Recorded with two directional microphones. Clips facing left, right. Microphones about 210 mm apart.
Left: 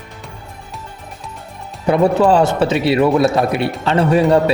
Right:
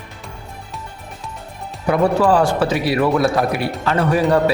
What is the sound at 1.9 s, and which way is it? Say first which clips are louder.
A man's voice: left 3 dB; 25° left (ahead or behind).